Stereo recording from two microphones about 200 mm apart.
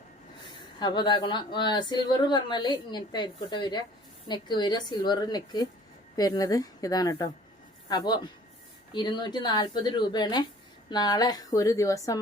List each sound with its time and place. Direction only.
0.8 s a woman's voice: 20° left (ahead or behind)